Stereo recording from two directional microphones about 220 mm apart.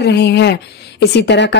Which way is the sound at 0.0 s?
50° left (ahead or behind).